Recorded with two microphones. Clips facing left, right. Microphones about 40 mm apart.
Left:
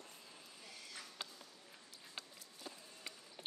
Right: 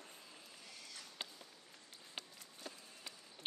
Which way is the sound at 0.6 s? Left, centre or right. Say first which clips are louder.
Left 3 dB; centre.